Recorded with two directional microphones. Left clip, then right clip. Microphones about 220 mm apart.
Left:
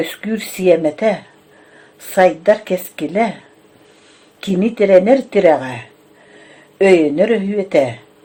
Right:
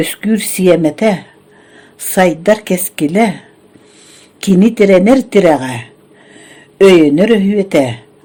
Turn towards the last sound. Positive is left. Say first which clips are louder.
# right 3 dB
turn(degrees=-45)  # may be behind; listen again after turning